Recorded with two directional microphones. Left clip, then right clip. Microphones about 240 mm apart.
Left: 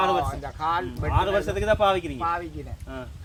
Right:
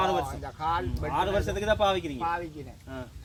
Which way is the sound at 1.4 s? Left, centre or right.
Centre.